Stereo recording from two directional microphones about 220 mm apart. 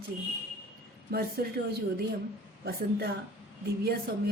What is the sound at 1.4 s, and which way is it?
Speech, 45° right (ahead or behind).